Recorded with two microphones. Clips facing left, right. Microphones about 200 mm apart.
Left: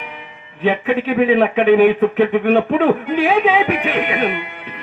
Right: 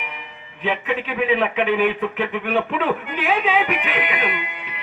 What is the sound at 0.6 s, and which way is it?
Speech, 45° left (ahead or behind).